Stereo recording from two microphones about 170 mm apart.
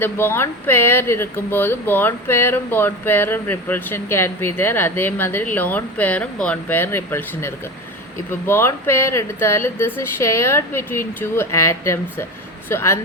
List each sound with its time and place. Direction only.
0.0 s speech: 15° left (ahead or behind)